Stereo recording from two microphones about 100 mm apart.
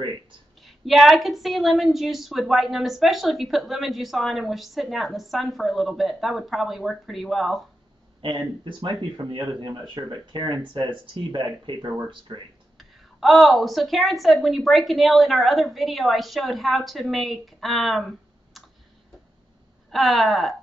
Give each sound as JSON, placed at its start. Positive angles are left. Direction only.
{"t": 0.6, "sound": "a woman's voice", "side_deg": 0}
{"t": 8.2, "sound": "speech", "side_deg": -55}
{"t": 12.7, "sound": "a woman's voice", "side_deg": 0}
{"t": 19.9, "sound": "a woman's voice", "side_deg": 0}